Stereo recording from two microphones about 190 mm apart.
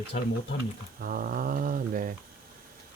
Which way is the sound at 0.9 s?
50° right (ahead or behind).